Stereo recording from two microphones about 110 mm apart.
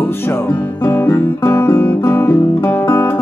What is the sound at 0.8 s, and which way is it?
Guitar, 20° left (ahead or behind).